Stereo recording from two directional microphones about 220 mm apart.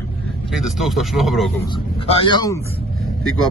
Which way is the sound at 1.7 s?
25° left (ahead or behind).